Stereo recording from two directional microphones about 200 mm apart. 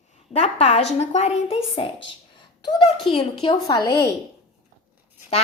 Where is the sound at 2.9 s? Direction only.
Centre (ahead or behind).